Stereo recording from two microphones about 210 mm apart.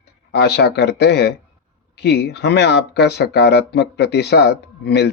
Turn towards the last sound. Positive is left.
turn(degrees=50)  # may be behind; listen again after turning